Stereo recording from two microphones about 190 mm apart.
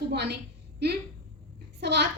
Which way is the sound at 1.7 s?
65° right (ahead or behind).